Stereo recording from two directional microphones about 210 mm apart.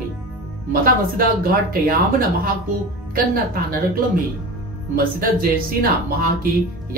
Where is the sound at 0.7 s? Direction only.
45° right (ahead or behind).